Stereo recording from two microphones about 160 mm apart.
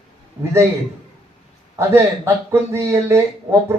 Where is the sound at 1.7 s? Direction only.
15° right (ahead or behind).